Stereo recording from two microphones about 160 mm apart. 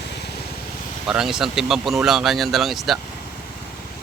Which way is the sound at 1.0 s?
5° right (ahead or behind).